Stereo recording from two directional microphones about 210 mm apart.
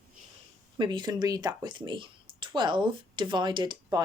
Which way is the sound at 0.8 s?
20° right (ahead or behind).